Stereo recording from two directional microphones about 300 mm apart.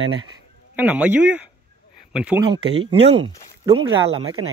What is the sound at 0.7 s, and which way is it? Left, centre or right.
A man's voice, centre.